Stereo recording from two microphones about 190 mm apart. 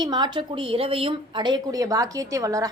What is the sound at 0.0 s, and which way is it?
Speech, 25° right (ahead or behind).